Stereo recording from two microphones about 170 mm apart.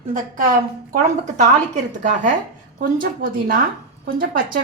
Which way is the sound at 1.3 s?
45° right (ahead or behind).